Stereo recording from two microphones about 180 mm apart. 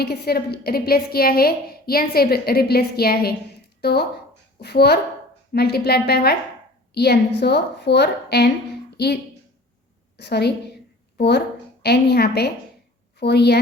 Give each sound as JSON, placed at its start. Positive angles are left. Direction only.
{"t": 0.0, "sound": "a woman's voice", "side_deg": 60}
{"t": 10.2, "sound": "a woman's voice", "side_deg": 65}